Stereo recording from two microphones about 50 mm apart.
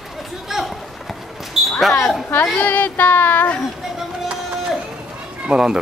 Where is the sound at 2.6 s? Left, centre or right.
Left.